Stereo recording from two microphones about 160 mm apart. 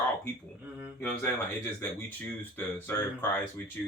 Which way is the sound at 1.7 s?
10° left (ahead or behind).